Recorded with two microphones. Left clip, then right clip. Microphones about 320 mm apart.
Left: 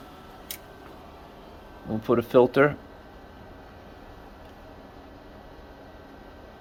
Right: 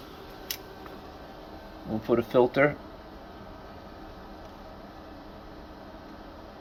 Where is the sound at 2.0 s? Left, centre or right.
Left.